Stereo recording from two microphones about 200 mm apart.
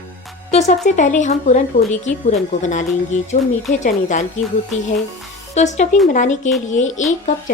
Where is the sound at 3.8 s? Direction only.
35° left (ahead or behind).